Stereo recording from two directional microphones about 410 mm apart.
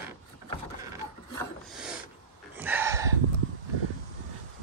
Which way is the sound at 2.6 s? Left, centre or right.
Centre.